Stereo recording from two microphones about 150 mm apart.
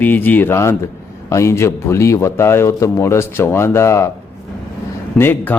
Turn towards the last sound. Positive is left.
turn(degrees=15)  # may be behind; listen again after turning